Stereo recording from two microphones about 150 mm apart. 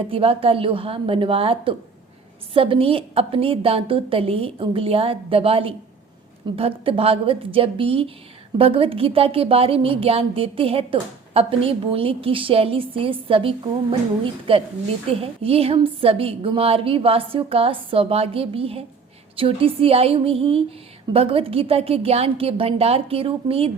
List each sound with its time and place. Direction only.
0.1 s a woman's voice: 40° right (ahead or behind)
14.5 s a woman's voice: 40° right (ahead or behind)